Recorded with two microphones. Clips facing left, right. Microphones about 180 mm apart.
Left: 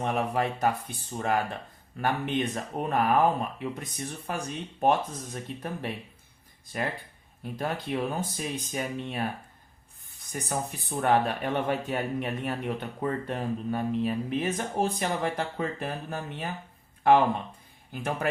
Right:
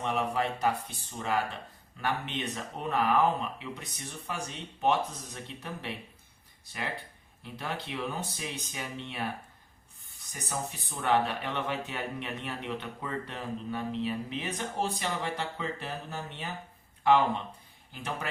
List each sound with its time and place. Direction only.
0.0 s speech: 50° left (ahead or behind)
7.9 s speech: 45° left (ahead or behind)
10.3 s speech: 55° left (ahead or behind)
17.9 s speech: 50° left (ahead or behind)